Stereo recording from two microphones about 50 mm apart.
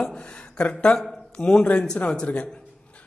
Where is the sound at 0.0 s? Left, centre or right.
Left.